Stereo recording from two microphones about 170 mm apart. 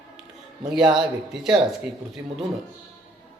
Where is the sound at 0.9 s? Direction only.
Centre (ahead or behind).